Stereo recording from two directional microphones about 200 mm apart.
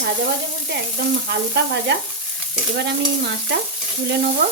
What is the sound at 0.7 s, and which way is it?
Stir, 55° right (ahead or behind).